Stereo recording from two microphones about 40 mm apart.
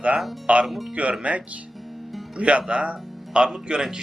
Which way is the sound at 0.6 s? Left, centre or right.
Centre.